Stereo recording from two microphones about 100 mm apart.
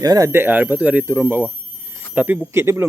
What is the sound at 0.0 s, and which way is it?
Speech, 40° right (ahead or behind).